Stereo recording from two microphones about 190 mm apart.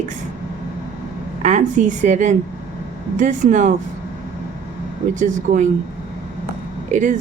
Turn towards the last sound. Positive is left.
turn(degrees=-40)  # may be behind; listen again after turning